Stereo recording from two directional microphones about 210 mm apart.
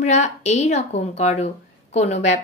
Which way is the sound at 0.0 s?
35° left (ahead or behind).